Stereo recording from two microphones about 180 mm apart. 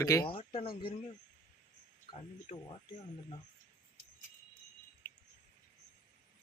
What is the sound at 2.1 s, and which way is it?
Speech, 30° left (ahead or behind).